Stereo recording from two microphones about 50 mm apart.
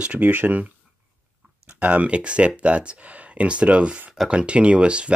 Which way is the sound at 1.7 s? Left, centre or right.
Right.